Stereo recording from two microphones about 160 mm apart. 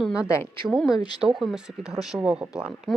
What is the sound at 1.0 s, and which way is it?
Speech, 25° left (ahead or behind).